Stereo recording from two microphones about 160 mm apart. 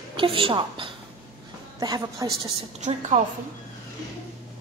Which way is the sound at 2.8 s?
45° right (ahead or behind).